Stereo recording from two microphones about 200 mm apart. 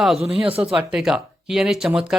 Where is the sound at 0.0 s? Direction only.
Centre (ahead or behind).